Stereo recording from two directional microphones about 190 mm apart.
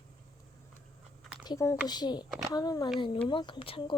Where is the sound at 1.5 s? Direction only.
15° left (ahead or behind).